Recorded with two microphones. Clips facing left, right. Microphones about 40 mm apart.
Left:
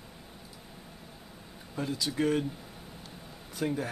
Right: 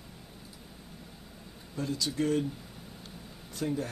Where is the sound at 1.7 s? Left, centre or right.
Centre.